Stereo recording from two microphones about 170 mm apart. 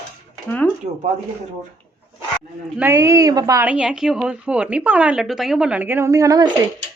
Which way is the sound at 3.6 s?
5° right (ahead or behind).